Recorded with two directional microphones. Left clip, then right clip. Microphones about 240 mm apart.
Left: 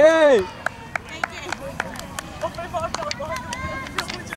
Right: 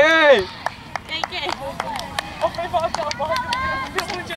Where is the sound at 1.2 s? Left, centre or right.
Centre.